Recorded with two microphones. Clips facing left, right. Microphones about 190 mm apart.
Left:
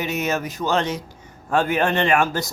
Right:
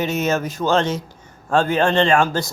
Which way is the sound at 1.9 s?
30° right (ahead or behind).